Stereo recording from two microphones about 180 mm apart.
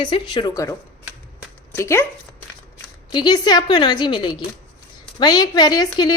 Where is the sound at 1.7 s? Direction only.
15° left (ahead or behind).